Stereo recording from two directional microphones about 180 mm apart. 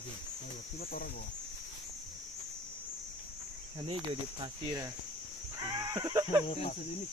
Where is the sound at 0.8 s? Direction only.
55° left (ahead or behind).